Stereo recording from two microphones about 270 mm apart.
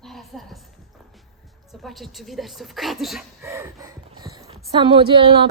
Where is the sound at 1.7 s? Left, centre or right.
Centre.